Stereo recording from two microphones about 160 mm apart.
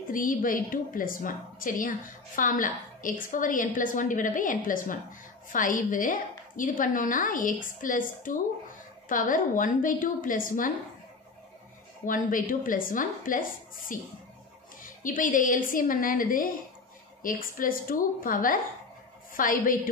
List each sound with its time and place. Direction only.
0.1 s a woman's voice: 60° left (ahead or behind)
12.1 s a woman's voice: 55° left (ahead or behind)